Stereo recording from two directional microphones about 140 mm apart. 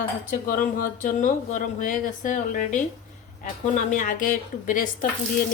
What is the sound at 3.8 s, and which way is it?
Speech, 70° left (ahead or behind).